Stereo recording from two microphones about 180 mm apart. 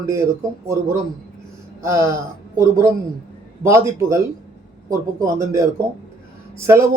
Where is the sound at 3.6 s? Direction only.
15° right (ahead or behind).